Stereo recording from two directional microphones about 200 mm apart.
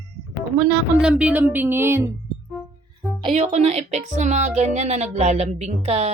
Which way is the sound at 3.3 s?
35° right (ahead or behind).